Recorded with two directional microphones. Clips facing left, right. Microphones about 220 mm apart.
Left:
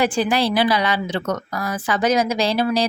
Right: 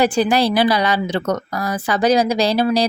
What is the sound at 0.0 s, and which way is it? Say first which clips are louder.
A woman's voice: right 3 dB; 40° right (ahead or behind).